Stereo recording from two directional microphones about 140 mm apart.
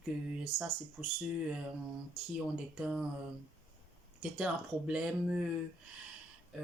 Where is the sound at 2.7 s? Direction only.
5° right (ahead or behind).